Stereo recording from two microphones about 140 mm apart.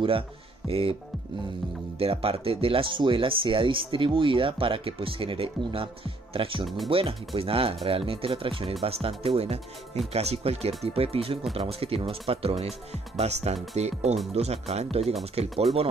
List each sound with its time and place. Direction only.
0.7 s speech: 40° right (ahead or behind)
2.0 s speech: 45° right (ahead or behind)